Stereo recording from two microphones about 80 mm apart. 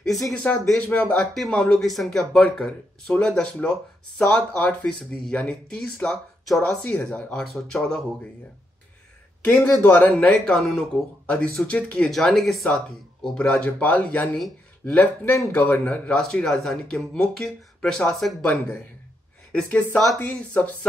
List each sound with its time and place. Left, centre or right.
0.0 s speech: centre
9.4 s speech: left
12.1 s speech: centre
19.5 s speech: centre